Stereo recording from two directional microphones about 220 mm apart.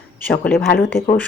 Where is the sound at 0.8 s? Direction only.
10° left (ahead or behind).